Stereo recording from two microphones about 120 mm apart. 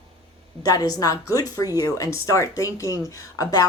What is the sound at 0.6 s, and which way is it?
A woman's voice, 30° left (ahead or behind).